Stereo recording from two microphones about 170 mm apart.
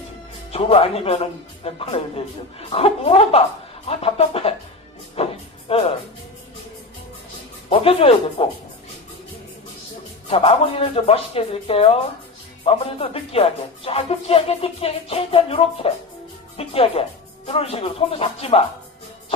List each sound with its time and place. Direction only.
0.5 s music: 35° left (ahead or behind)
7.7 s music: 35° left (ahead or behind)
10.3 s music: 35° left (ahead or behind)